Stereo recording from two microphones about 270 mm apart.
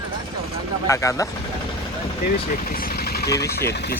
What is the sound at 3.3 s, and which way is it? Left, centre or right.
Speech, centre.